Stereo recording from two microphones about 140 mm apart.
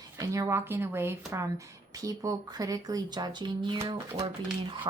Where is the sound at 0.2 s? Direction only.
25° right (ahead or behind).